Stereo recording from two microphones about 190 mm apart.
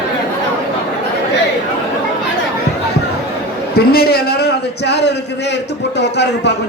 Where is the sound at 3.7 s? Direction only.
55° left (ahead or behind).